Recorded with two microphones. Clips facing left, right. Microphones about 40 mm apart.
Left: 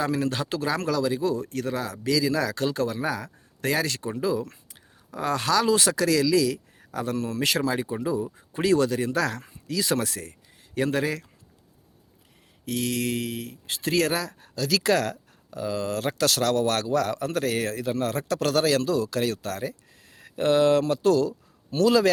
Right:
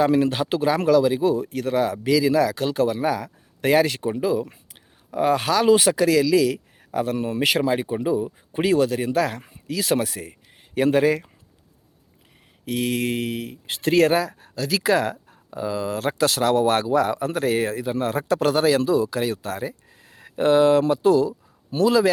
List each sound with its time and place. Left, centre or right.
0.0 s speech: centre
3.7 s speech: right
8.7 s speech: centre
12.6 s speech: right
14.8 s speech: centre
15.1 s a sound: right
15.6 s speech: centre